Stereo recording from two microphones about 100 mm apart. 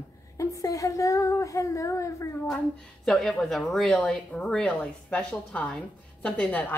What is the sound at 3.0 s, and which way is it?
A woman's voice, 5° left (ahead or behind).